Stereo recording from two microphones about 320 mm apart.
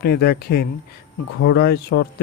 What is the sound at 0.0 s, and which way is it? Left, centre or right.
A man's voice, left.